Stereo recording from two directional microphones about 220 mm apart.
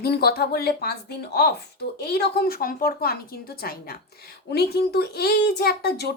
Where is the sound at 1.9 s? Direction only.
45° left (ahead or behind).